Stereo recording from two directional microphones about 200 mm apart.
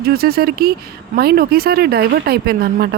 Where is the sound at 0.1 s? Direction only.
50° right (ahead or behind).